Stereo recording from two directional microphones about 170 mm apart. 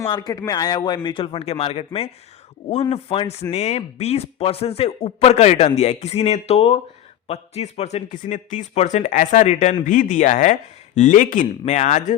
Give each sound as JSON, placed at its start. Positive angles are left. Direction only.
{"t": 0.1, "sound": "a man's voice", "side_deg": 25}